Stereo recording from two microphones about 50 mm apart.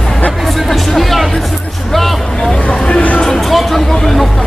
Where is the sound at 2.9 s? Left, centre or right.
Left.